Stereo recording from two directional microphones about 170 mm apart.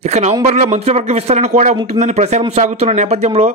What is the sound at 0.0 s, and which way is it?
A man's voice, 40° right (ahead or behind).